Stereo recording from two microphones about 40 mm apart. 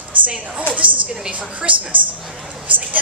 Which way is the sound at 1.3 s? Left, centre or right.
Right.